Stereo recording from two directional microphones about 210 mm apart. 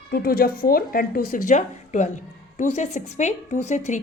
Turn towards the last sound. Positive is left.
turn(degrees=35)  # may be behind; listen again after turning